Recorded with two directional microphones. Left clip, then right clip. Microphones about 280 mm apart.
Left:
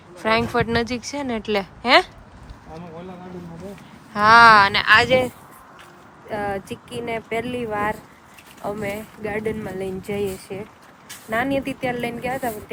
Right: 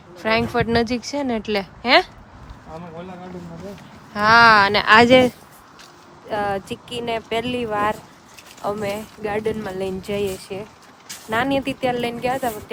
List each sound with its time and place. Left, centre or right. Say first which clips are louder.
0.2 s speech: even; centre
4.1 s speech: left 1 dB; centre
4.9 s speech: right 4 dB; right
6.2 s a woman's voice: right 3 dB; centre